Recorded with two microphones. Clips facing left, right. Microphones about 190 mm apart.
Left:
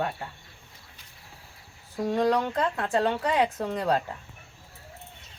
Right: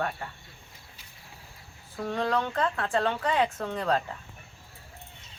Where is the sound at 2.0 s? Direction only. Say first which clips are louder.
Left 4 dB; 15° left (ahead or behind).